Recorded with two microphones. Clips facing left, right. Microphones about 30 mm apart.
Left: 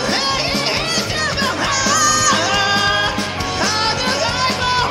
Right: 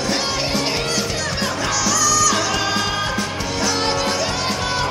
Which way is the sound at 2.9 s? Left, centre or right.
Left.